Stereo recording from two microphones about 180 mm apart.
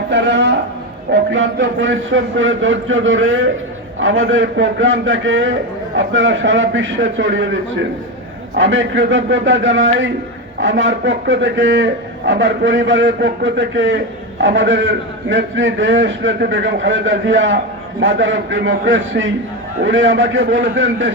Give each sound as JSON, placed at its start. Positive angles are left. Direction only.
{"t": 0.1, "sound": "a man's voice", "side_deg": -85}